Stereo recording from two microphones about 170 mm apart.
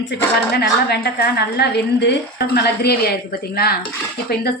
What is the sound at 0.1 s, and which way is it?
Speech, 90° left.